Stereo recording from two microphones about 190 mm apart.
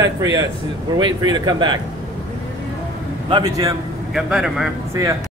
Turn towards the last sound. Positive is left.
turn(degrees=-15)  # may be behind; listen again after turning